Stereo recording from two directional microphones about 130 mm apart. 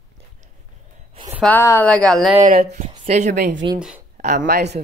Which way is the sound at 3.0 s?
65° right (ahead or behind).